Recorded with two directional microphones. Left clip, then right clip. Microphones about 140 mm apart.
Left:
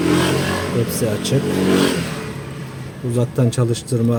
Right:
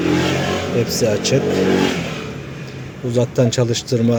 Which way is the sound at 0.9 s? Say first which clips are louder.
Right 4 dB; 5° left (ahead or behind).